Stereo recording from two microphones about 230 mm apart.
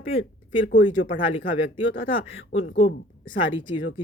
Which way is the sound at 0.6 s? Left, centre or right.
Left.